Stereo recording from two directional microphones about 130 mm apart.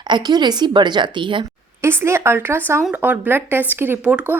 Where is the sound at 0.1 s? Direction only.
35° right (ahead or behind).